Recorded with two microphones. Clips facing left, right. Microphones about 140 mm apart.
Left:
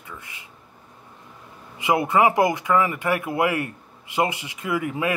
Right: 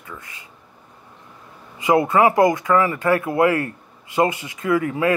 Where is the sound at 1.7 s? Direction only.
15° left (ahead or behind).